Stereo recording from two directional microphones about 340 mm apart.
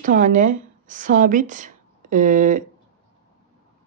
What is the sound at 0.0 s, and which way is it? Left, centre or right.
A woman's voice, right.